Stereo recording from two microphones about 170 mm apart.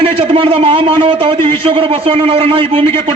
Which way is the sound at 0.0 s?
30° right (ahead or behind).